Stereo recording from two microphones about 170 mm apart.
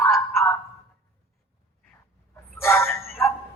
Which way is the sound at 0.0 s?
15° left (ahead or behind).